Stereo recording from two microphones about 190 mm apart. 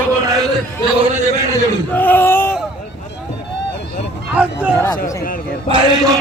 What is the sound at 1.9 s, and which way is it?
Speech, 10° left (ahead or behind).